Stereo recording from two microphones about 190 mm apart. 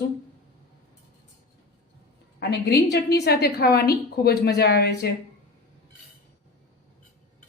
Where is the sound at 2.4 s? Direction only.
60° left (ahead or behind).